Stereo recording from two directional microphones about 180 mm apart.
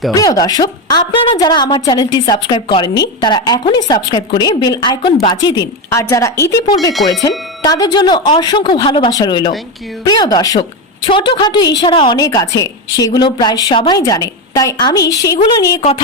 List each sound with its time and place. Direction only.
0.1 s a woman's voice: 20° left (ahead or behind)